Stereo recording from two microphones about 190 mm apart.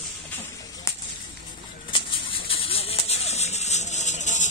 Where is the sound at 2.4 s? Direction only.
30° left (ahead or behind).